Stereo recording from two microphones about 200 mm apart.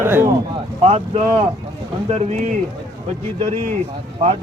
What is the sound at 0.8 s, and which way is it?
Speech, 30° right (ahead or behind).